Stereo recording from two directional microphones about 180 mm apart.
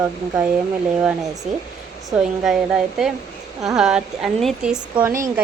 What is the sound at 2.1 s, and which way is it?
A woman's voice, centre (ahead or behind).